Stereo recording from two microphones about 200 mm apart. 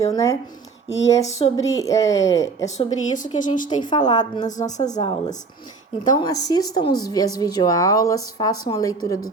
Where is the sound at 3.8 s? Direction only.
20° left (ahead or behind).